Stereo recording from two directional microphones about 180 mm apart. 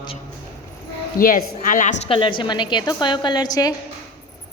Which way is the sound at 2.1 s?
25° left (ahead or behind).